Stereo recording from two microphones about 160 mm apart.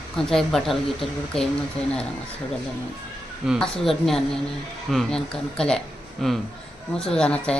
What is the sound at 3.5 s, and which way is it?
Speech, centre (ahead or behind).